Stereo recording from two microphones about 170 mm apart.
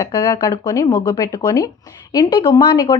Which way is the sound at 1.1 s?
15° left (ahead or behind).